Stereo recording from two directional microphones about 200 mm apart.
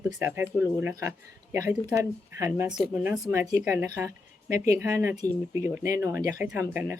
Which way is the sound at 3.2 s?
15° right (ahead or behind).